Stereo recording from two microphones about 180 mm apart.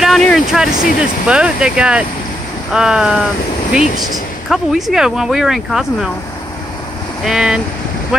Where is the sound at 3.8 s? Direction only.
45° left (ahead or behind).